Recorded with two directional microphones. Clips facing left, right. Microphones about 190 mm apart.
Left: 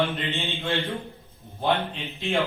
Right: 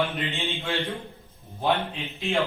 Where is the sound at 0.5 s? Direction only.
15° right (ahead or behind).